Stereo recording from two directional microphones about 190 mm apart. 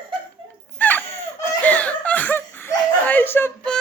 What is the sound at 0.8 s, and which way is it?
Chicken, 10° left (ahead or behind).